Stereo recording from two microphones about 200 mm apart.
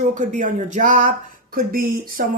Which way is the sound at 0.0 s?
40° right (ahead or behind).